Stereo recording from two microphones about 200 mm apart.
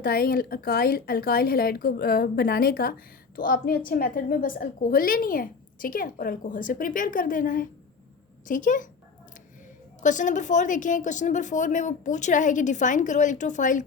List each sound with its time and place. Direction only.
0.0 s a woman's voice: 50° left (ahead or behind)
10.0 s a woman's voice: 40° left (ahead or behind)